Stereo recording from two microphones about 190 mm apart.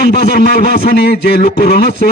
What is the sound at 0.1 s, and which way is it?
A man's voice, 55° left (ahead or behind).